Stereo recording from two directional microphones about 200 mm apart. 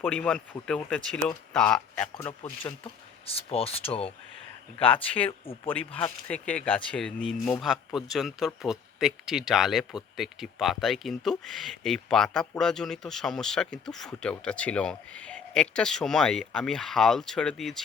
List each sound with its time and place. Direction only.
0.0 s speech: 5° left (ahead or behind)
2.4 s speech: 25° left (ahead or behind)
6.2 s speech: 5° left (ahead or behind)